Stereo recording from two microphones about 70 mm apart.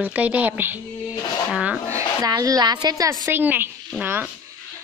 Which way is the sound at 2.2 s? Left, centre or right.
Right.